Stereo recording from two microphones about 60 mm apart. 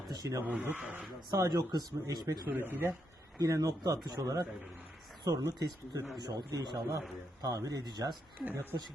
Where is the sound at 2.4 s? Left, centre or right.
Right.